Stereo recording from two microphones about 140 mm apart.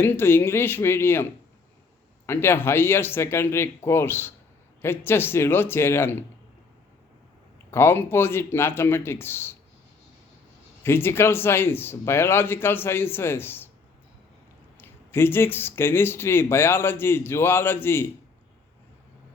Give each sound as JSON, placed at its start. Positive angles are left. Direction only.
{"t": 0.0, "sound": "speech", "side_deg": 15}
{"t": 7.7, "sound": "speech", "side_deg": 15}
{"t": 10.8, "sound": "speech", "side_deg": 15}
{"t": 14.8, "sound": "speech", "side_deg": 15}